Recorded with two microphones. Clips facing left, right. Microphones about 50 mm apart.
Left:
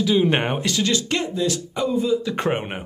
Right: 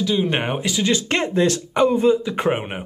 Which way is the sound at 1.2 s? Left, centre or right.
Right.